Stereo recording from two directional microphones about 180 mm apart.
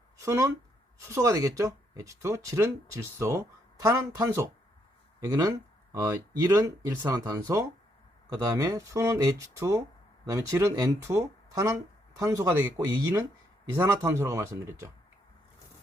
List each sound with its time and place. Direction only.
0.2 s speech: 15° right (ahead or behind)
13.7 s speech: 15° right (ahead or behind)